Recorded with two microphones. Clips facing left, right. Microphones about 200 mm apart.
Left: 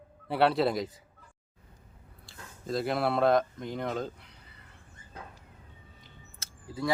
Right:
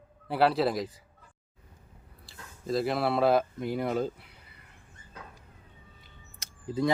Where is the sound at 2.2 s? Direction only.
Centre (ahead or behind).